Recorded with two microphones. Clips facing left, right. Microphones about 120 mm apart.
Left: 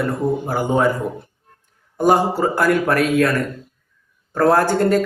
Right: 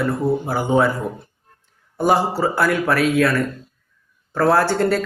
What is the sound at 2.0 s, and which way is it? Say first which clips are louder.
Speech: left 2 dB; 45° left (ahead or behind).